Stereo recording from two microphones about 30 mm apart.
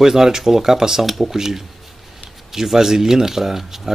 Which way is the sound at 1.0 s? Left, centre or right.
Centre.